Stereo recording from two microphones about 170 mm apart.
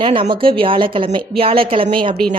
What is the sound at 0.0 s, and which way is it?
Speech, 30° right (ahead or behind).